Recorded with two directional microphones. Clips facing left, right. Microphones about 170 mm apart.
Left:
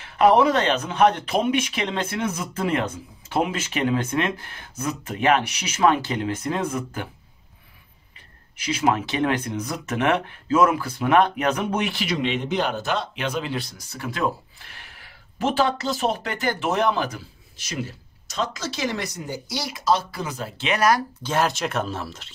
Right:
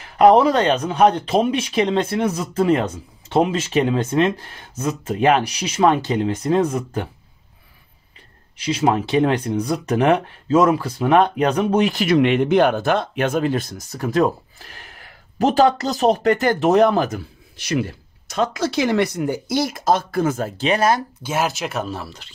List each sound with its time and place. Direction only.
0.0 s speech: 40° right (ahead or behind)
8.7 s speech: 35° right (ahead or behind)
17.6 s speech: 65° right (ahead or behind); by 21.0 s 30° right (ahead or behind)
21.2 s speech: 5° right (ahead or behind)